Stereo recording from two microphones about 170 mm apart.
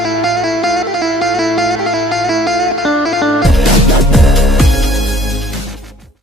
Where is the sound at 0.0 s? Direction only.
Centre (ahead or behind).